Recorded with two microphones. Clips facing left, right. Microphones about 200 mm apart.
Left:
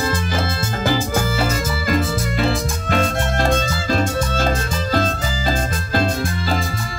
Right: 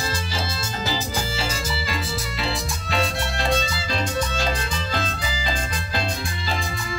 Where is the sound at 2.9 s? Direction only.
50° left (ahead or behind).